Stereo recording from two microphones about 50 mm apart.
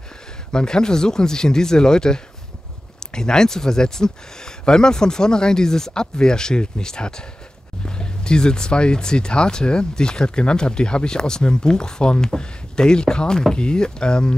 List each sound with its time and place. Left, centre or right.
0.5 s speech: centre